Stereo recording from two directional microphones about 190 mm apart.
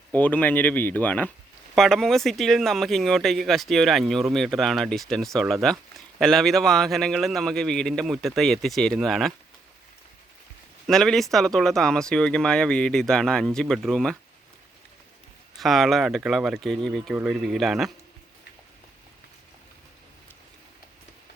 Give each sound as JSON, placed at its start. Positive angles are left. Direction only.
{"t": 0.1, "sound": "speech", "side_deg": 10}
{"t": 10.8, "sound": "speech", "side_deg": 0}
{"t": 15.5, "sound": "speech", "side_deg": 0}